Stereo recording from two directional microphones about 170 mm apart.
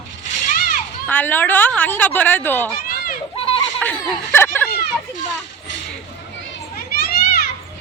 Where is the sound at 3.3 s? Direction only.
30° left (ahead or behind).